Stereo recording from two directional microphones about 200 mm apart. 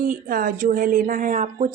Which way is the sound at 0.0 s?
45° right (ahead or behind).